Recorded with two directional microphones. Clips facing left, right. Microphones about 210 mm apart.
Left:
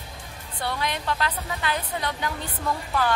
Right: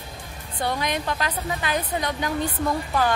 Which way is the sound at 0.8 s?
15° right (ahead or behind).